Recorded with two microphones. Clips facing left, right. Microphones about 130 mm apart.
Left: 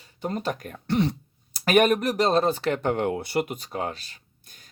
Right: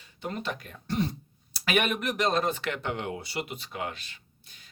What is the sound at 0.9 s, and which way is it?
Speech, 75° left (ahead or behind).